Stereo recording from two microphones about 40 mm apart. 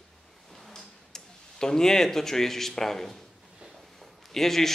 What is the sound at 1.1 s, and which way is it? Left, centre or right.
A man's voice, centre.